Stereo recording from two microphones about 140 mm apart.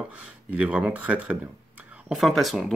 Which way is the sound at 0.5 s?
10° right (ahead or behind).